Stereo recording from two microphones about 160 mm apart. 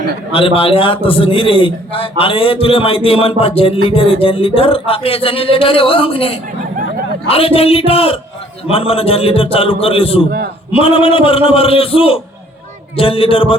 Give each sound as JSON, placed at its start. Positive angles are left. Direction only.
{"t": 0.3, "sound": "a man's voice", "side_deg": 35}